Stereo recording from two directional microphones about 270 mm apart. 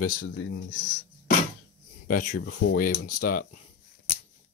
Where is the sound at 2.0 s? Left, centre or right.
Left.